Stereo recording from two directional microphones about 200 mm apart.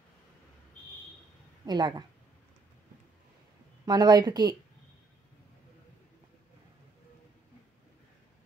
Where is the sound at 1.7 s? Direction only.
20° right (ahead or behind).